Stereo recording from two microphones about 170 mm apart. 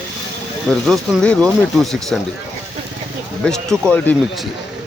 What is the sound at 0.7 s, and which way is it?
Speech, centre (ahead or behind).